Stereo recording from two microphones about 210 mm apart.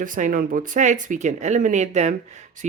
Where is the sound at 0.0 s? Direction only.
40° right (ahead or behind).